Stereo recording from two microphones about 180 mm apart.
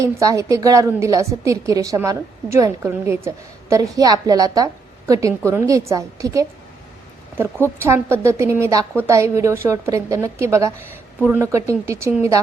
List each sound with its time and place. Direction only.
0.0 s a woman's voice: 15° right (ahead or behind)
7.8 s a woman's voice: 15° right (ahead or behind)